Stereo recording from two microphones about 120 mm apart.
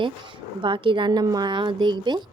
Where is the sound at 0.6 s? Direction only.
45° right (ahead or behind).